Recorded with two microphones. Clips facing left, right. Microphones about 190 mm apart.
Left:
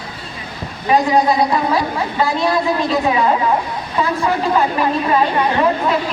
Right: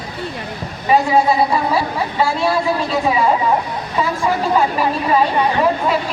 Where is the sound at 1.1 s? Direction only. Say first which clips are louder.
Even; 5° right (ahead or behind).